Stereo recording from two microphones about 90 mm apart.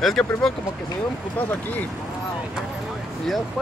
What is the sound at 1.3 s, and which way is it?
Speech, 20° left (ahead or behind).